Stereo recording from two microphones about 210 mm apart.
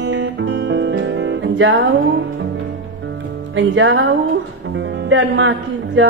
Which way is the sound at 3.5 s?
65° right (ahead or behind).